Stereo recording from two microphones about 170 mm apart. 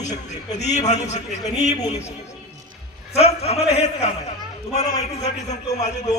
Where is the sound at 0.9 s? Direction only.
40° left (ahead or behind).